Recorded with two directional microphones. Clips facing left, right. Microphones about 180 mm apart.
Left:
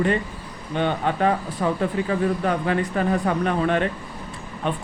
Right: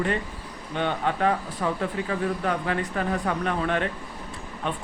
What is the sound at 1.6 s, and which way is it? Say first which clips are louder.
Speech: left 4 dB; 15° left (ahead or behind).